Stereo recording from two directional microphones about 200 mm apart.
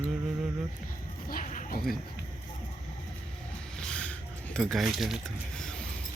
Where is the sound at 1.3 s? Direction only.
45° left (ahead or behind).